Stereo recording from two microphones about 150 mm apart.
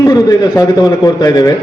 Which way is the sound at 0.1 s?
25° left (ahead or behind).